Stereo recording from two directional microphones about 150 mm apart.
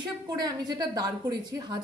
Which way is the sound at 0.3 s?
25° right (ahead or behind).